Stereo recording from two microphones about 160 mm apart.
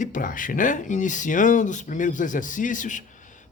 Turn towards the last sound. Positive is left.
turn(degrees=55)  # may be behind; listen again after turning